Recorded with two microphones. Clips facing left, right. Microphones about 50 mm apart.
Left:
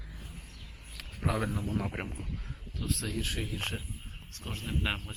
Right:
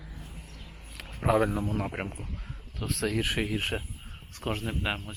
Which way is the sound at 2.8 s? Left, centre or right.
Right.